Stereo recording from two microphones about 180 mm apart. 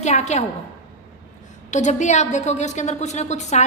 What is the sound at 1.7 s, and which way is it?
A woman's voice, 40° left (ahead or behind).